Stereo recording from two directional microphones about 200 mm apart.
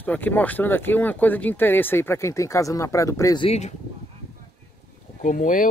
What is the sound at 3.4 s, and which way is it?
Speech, 30° left (ahead or behind).